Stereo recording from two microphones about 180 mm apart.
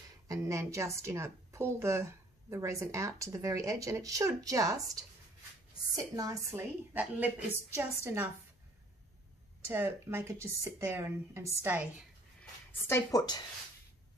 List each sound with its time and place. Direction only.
0.3 s a woman's voice: 15° right (ahead or behind)
5.9 s a woman's voice: 20° right (ahead or behind)
9.7 s a woman's voice: 15° right (ahead or behind)
12.8 s a woman's voice: 15° left (ahead or behind)